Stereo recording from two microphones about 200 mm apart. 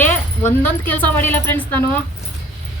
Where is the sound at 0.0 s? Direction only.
10° left (ahead or behind).